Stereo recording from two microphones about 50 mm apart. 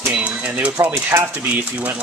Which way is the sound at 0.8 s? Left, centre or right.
Right.